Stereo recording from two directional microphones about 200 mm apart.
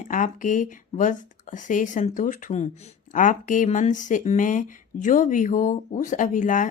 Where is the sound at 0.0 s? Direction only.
40° left (ahead or behind).